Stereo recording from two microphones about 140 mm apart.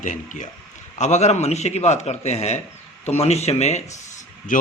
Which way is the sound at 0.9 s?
55° left (ahead or behind).